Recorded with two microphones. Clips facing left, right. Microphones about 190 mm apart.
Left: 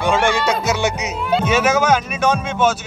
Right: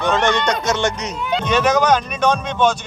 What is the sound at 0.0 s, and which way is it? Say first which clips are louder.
Speech: even; 10° left (ahead or behind).